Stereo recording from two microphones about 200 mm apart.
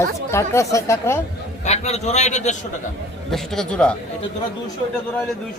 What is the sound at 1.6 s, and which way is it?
Speech, 35° left (ahead or behind).